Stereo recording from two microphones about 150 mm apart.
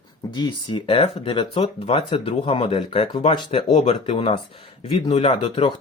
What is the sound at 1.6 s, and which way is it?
Speech, 45° left (ahead or behind).